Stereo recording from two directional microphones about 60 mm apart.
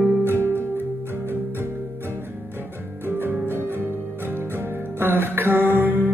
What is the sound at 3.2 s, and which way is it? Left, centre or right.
Music, right.